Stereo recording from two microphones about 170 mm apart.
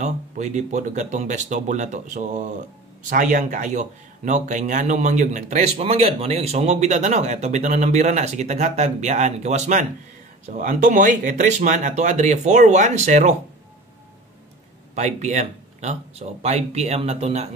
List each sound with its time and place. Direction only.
0.0 s speech: 45° right (ahead or behind)
15.0 s speech: 45° right (ahead or behind)